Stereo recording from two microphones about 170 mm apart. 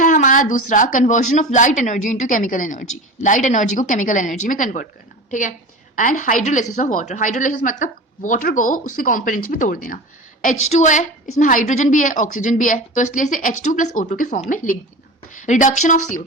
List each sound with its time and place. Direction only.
0.0 s speech: 50° left (ahead or behind)
10.4 s speech: 45° left (ahead or behind)